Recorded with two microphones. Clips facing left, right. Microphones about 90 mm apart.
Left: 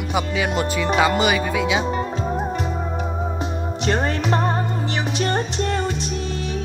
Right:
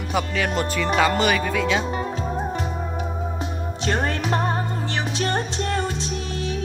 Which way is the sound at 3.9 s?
20° left (ahead or behind).